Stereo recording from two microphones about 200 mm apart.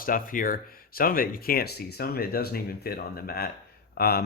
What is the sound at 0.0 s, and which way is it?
Speech, 45° left (ahead or behind).